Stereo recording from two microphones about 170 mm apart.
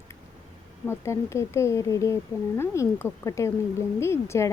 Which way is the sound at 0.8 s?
15° left (ahead or behind).